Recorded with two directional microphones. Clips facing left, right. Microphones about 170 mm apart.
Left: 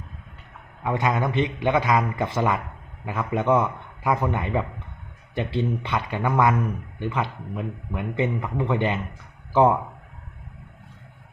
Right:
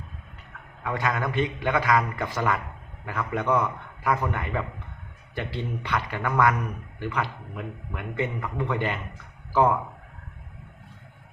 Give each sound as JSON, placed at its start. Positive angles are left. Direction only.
{"t": 0.9, "sound": "a man's voice", "side_deg": 20}